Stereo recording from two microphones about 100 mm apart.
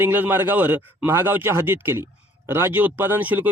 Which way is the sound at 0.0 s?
20° right (ahead or behind).